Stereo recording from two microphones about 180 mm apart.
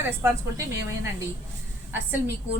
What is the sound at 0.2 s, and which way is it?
A woman's voice, 15° right (ahead or behind).